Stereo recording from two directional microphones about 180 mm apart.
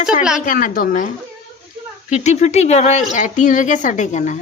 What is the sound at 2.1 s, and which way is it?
Speech, 40° left (ahead or behind).